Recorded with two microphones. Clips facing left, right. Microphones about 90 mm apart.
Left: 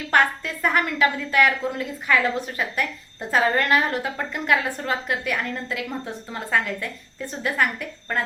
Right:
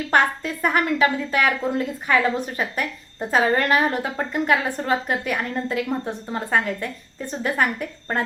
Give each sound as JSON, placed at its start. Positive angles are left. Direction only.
{"t": 0.1, "sound": "a woman's voice", "side_deg": -30}